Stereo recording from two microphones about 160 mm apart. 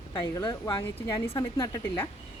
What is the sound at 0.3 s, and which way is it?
Speech, 20° left (ahead or behind).